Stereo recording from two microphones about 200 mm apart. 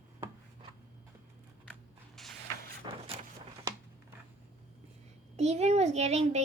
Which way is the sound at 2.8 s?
25° right (ahead or behind).